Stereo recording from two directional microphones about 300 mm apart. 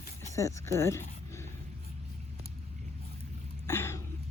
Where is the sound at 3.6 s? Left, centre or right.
Centre.